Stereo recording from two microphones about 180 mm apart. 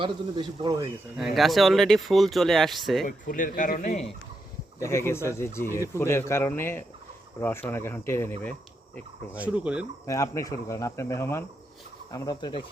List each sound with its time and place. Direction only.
0.0 s speech: 25° right (ahead or behind)
1.1 s speech: centre (ahead or behind)
3.2 s speech: 50° left (ahead or behind)
4.8 s speech: 15° left (ahead or behind)
9.3 s speech: 5° right (ahead or behind)
10.1 s speech: 20° left (ahead or behind)
12.1 s fowl: 20° left (ahead or behind)